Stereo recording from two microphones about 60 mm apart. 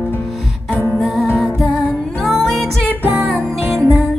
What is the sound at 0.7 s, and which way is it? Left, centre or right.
Music, centre.